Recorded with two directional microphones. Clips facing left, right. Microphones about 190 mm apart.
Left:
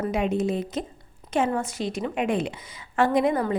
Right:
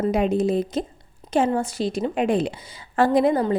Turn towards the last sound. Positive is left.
turn(degrees=-35)  # may be behind; listen again after turning